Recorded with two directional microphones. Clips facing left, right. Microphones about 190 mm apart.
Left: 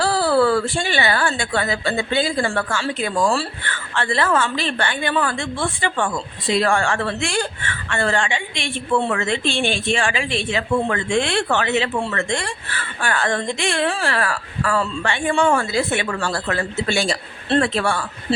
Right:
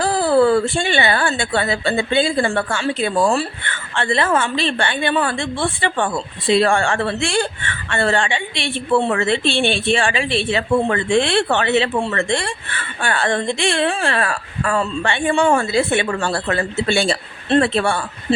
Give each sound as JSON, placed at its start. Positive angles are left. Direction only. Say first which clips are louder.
{"t": 0.0, "sound": "a woman's voice", "louder": "right 2 dB", "side_deg": -20}